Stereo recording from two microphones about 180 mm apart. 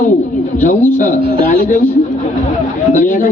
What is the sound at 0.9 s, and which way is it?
Speech, 45° left (ahead or behind).